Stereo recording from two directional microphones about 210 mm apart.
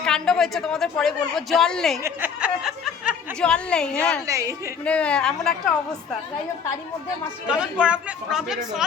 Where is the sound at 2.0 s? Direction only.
10° right (ahead or behind).